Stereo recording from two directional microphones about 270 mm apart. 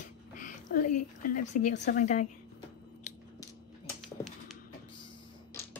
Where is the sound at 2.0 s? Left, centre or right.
Left.